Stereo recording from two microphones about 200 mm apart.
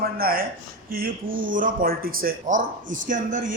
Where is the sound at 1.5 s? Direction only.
45° right (ahead or behind).